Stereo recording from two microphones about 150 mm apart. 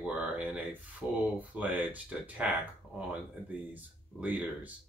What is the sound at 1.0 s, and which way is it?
Speech, 20° left (ahead or behind).